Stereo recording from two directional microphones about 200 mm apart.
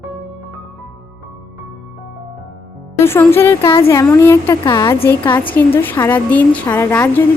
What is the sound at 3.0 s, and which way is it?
A woman's voice, 10° left (ahead or behind).